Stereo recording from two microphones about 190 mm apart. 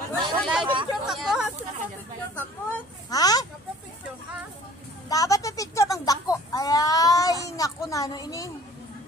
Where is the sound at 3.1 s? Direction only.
20° left (ahead or behind).